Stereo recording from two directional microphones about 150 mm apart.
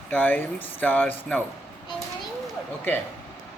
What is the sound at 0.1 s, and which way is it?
Speech, 10° left (ahead or behind).